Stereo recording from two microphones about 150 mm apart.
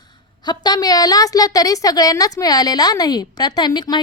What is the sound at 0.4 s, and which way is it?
A woman's voice, 25° left (ahead or behind).